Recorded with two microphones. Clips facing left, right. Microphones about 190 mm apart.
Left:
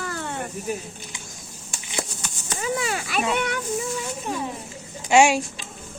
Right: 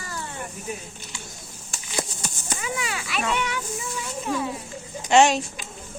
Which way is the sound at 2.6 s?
40° left (ahead or behind).